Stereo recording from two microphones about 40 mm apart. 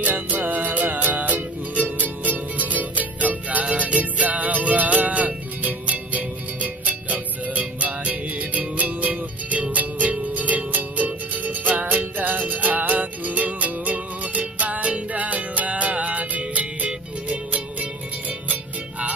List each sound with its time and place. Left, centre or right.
0.0 s music: right